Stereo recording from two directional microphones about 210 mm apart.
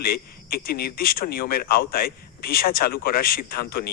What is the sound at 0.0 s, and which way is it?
Speech, 45° left (ahead or behind).